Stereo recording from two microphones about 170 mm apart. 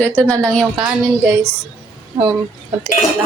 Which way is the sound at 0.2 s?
Centre (ahead or behind).